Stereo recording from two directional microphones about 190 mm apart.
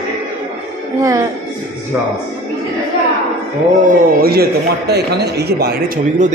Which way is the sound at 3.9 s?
55° right (ahead or behind).